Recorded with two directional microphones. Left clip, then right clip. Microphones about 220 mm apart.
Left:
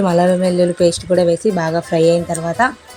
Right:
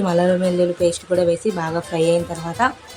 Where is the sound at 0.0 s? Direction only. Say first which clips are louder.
Left 4 dB; 20° left (ahead or behind).